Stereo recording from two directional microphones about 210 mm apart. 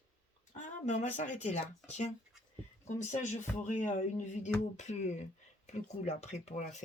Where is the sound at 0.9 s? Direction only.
35° left (ahead or behind).